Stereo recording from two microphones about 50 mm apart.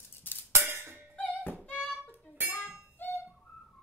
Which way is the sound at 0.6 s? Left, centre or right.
Right.